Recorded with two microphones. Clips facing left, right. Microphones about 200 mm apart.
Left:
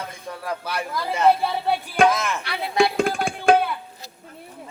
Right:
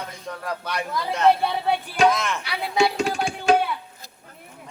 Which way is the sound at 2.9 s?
55° left (ahead or behind).